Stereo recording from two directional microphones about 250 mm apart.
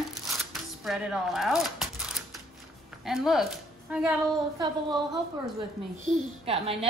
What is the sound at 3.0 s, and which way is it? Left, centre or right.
A woman's voice, centre.